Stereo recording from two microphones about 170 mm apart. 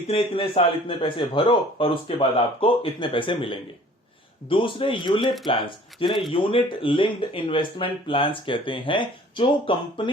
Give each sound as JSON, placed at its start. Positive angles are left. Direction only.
{"t": 0.1, "sound": "a man's voice", "side_deg": 30}